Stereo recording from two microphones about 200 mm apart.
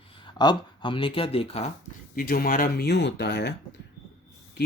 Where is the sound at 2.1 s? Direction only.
45° left (ahead or behind).